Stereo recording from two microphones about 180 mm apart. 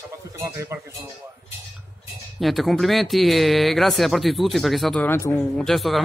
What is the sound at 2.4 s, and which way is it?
Speech, centre (ahead or behind).